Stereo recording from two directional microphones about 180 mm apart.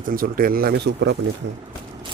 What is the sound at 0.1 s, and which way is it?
Speech, 55° right (ahead or behind).